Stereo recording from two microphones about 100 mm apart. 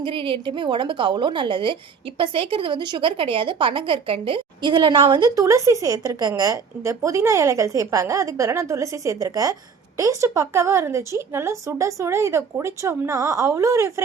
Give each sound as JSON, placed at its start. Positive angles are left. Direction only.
{"t": 0.0, "sound": "a woman's voice", "side_deg": -60}
{"t": 5.4, "sound": "a woman's voice", "side_deg": -30}